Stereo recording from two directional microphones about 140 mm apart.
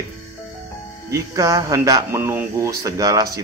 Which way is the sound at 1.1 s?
25° right (ahead or behind).